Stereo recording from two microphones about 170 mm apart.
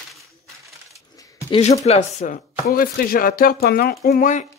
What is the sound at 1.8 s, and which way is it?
Speech, 40° left (ahead or behind).